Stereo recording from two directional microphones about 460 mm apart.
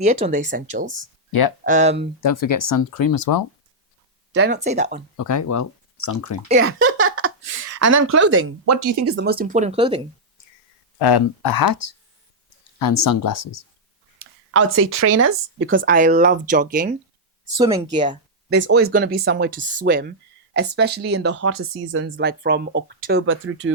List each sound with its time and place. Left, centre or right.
0.0 s speech: centre
2.2 s speech: left
4.4 s speech: right
5.1 s speech: left
6.6 s speech: right
9.1 s speech: centre
11.0 s speech: left
14.2 s speech: right; by 18.2 s centre
18.5 s speech: right